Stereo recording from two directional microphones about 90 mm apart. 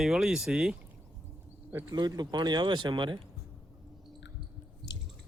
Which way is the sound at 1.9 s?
50° right (ahead or behind).